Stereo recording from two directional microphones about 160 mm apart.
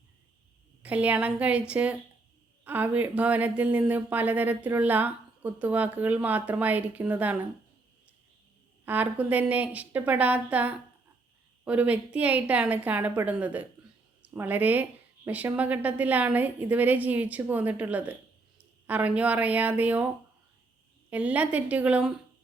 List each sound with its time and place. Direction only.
0.8 s speech: 10° right (ahead or behind)
8.8 s speech: 10° right (ahead or behind)
21.1 s speech: 10° right (ahead or behind)